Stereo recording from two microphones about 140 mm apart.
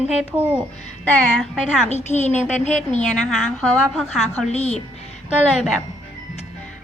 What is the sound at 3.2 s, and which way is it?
A woman's voice, 5° left (ahead or behind).